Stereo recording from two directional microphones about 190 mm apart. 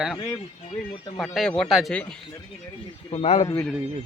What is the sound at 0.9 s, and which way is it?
Speech, 25° left (ahead or behind).